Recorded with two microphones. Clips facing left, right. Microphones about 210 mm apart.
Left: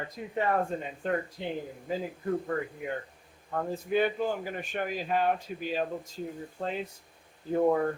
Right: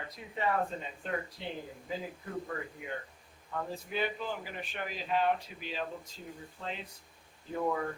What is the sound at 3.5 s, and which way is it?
A man's voice, 50° left (ahead or behind).